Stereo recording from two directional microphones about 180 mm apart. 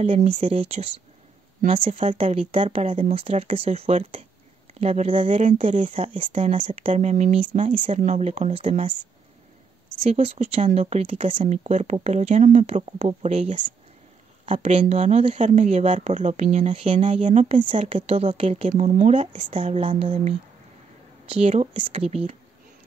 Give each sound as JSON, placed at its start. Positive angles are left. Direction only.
{"t": 0.0, "sound": "speech", "side_deg": -40}
{"t": 5.3, "sound": "speech", "side_deg": -45}
{"t": 10.0, "sound": "speech", "side_deg": -35}